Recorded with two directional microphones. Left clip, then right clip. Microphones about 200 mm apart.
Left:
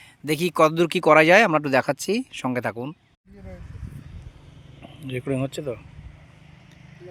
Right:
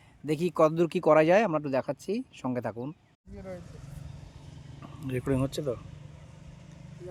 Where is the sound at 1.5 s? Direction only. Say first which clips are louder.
Left 9 dB; 15° left (ahead or behind).